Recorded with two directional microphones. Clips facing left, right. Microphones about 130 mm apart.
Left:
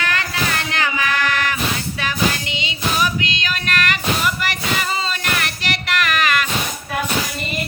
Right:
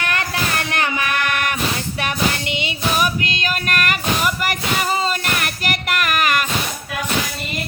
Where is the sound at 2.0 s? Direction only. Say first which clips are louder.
Left 1 dB; 60° right (ahead or behind).